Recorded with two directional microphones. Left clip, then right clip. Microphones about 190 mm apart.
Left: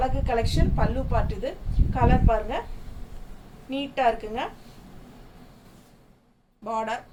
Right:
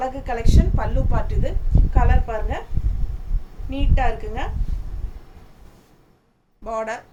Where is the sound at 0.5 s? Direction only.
10° right (ahead or behind).